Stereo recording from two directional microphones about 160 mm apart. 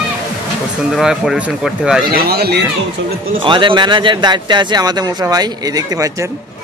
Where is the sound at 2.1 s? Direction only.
80° right.